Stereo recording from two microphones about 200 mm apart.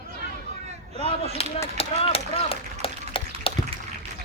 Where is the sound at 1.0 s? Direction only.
30° left (ahead or behind).